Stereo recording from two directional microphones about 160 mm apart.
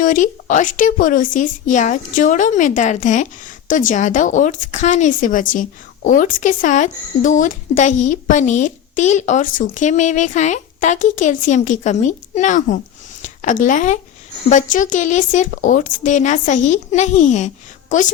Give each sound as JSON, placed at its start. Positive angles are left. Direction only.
{"t": 0.0, "sound": "speech", "side_deg": 55}